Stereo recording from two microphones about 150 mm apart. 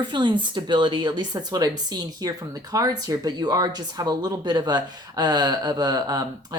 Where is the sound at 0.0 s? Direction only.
30° right (ahead or behind).